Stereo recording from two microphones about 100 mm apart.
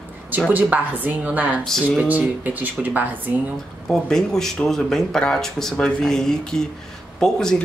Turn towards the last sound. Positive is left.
turn(degrees=5)  # may be behind; listen again after turning